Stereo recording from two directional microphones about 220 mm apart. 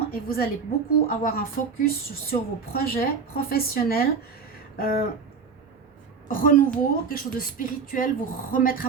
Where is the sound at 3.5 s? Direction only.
45° left (ahead or behind).